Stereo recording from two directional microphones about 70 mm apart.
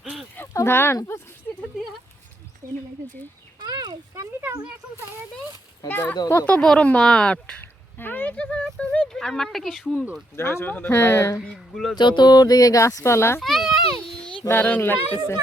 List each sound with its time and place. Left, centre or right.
0.0 s a sound: centre
0.5 s speech: left
3.6 s a sound: right
5.9 s speech: left
6.4 s speech: centre
7.6 s speech: left; by 9.8 s centre
10.3 s speech: left
11.7 s a child's voice: centre
11.9 s a sound: left
12.8 s speech: left
13.4 s a child's voice: centre
14.4 s speech: left
14.8 s speech: left